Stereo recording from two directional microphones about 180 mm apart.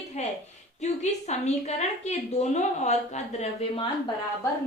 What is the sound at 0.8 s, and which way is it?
A woman's voice, 40° left (ahead or behind).